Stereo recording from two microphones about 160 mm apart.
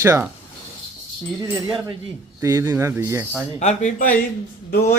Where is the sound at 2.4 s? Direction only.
20° right (ahead or behind).